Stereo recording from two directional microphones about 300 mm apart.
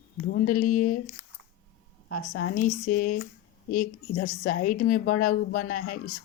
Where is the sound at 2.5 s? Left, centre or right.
Left.